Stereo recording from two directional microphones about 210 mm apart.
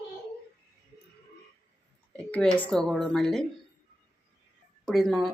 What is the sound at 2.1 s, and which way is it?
A woman's voice, 5° left (ahead or behind).